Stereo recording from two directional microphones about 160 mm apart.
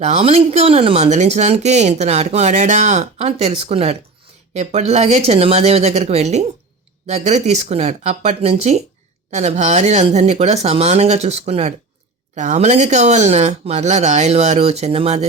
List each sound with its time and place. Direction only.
0.0 s speech: 40° right (ahead or behind)